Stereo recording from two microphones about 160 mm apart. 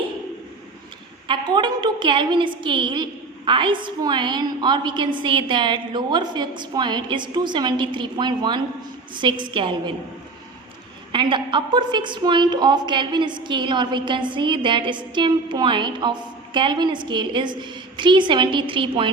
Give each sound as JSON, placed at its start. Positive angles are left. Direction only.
{"t": 1.3, "sound": "a woman's voice", "side_deg": -30}
{"t": 11.1, "sound": "a woman's voice", "side_deg": -30}